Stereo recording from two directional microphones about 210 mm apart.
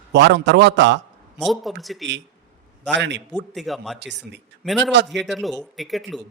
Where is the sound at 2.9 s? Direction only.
55° right (ahead or behind).